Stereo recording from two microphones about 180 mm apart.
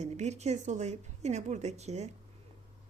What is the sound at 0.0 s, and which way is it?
Speech, 40° right (ahead or behind).